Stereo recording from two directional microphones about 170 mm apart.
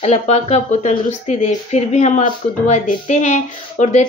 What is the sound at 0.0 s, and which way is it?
A woman's voice, 40° left (ahead or behind).